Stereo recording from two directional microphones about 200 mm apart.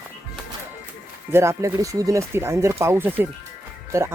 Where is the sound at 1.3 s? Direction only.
15° right (ahead or behind).